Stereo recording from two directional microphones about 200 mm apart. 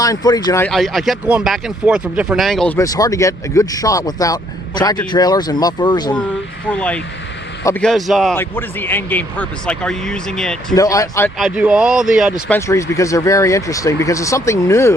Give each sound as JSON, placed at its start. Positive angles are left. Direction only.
{"t": 0.0, "sound": "speech", "side_deg": 20}
{"t": 0.7, "sound": "speech", "side_deg": 0}
{"t": 2.7, "sound": "speech", "side_deg": 15}
{"t": 6.7, "sound": "speech", "side_deg": 5}
{"t": 7.9, "sound": "speech", "side_deg": 0}
{"t": 8.4, "sound": "speech", "side_deg": 10}
{"t": 10.8, "sound": "speech", "side_deg": 15}
{"t": 11.3, "sound": "speech", "side_deg": -5}
{"t": 12.5, "sound": "speech", "side_deg": 15}